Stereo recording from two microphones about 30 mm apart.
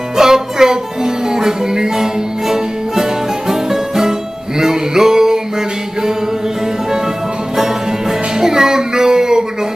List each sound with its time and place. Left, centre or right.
0.2 s music: centre
7.5 s music: centre